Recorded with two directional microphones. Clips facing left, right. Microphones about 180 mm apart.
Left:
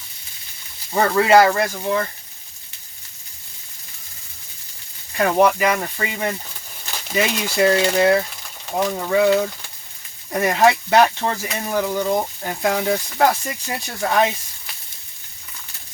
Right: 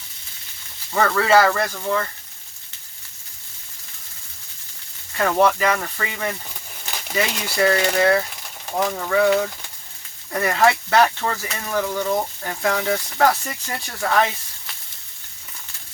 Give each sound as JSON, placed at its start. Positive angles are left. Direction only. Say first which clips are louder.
{"t": 0.9, "sound": "speech", "louder": "left 3 dB", "side_deg": 15}
{"t": 5.1, "sound": "speech", "louder": "left 2 dB", "side_deg": 15}